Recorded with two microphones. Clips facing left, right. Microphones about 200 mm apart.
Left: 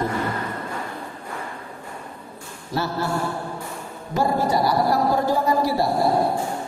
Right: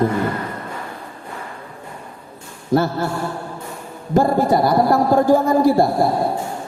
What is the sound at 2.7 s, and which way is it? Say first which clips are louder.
Speech: right 9 dB; 50° right (ahead or behind).